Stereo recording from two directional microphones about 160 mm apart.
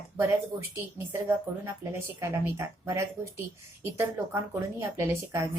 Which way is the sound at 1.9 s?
20° right (ahead or behind).